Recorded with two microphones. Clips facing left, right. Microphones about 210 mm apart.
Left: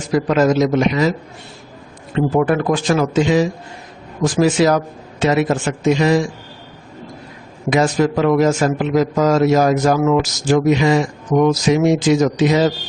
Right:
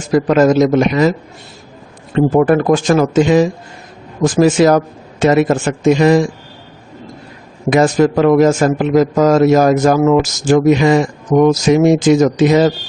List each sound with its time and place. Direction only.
0.1 s a man's voice: 45° right (ahead or behind)
2.1 s a man's voice: 45° right (ahead or behind)
7.7 s a man's voice: 50° right (ahead or behind)